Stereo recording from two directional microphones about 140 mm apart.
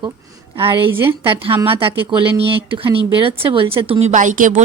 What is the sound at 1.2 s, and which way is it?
A woman's voice, 40° right (ahead or behind).